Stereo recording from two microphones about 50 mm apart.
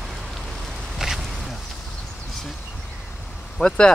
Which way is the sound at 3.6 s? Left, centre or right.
Centre.